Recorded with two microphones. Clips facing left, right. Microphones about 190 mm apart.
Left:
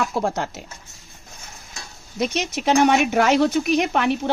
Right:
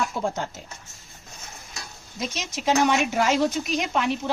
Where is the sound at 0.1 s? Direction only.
75° left (ahead or behind).